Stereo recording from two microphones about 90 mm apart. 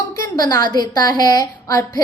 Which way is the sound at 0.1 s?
40° left (ahead or behind).